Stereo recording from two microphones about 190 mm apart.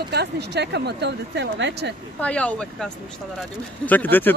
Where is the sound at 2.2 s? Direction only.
5° left (ahead or behind).